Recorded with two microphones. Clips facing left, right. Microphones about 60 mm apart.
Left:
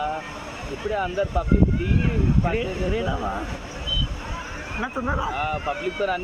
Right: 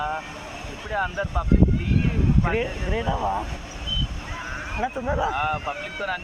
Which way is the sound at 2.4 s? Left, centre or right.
Right.